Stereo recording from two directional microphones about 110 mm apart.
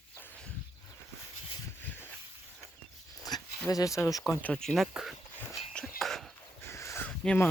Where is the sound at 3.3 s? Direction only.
40° left (ahead or behind).